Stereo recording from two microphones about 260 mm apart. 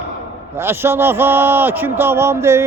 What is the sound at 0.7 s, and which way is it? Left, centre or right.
Speech, centre.